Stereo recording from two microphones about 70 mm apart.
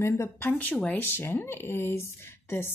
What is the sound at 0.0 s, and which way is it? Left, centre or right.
A woman's voice, left.